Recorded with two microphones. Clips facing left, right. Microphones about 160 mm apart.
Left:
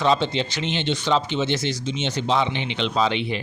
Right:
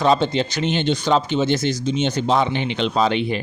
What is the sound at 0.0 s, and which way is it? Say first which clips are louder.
Speech: right 3 dB; 45° right (ahead or behind).